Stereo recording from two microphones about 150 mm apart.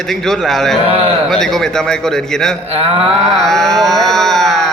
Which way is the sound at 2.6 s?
40° right (ahead or behind).